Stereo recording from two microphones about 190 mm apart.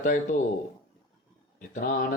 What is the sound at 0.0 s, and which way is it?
Speech, 40° left (ahead or behind).